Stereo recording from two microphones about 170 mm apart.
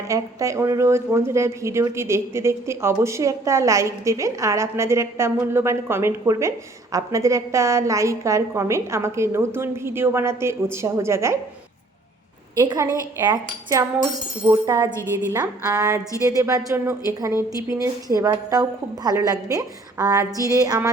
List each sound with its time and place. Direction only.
0.1 s speech: 20° right (ahead or behind)
12.5 s a woman's voice: 20° right (ahead or behind)